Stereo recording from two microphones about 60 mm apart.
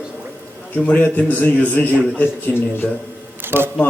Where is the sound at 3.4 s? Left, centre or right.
Right.